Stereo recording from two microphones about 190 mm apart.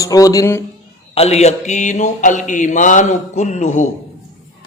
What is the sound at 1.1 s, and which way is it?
Speech, 35° left (ahead or behind).